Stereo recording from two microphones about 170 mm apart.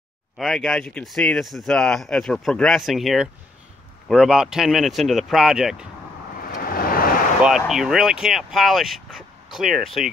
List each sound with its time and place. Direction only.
0.4 s speech: centre (ahead or behind)
6.4 s vehicle: 60° left (ahead or behind)
7.4 s speech: centre (ahead or behind)